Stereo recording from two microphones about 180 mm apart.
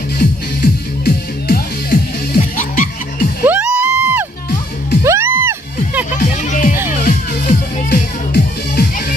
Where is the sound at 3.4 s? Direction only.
10° right (ahead or behind).